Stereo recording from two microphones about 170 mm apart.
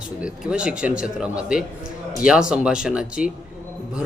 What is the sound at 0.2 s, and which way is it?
A man's voice, 5° right (ahead or behind).